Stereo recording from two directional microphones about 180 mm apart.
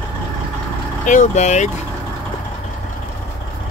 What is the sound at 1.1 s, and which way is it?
Speech, 40° left (ahead or behind).